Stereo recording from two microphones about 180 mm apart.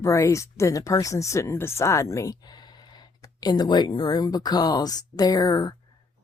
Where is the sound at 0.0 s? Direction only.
15° left (ahead or behind).